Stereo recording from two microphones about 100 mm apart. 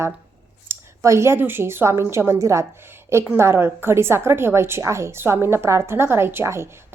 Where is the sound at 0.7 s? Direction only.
30° right (ahead or behind).